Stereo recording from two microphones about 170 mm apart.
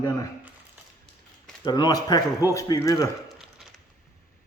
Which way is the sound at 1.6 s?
25° left (ahead or behind).